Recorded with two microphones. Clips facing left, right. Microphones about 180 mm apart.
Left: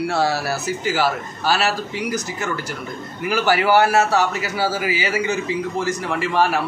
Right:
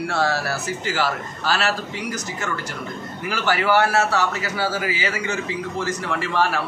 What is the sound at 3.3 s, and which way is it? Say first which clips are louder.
A man's voice: left 3 dB; 10° left (ahead or behind).